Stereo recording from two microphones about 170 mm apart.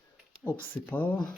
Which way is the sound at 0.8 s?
10° left (ahead or behind).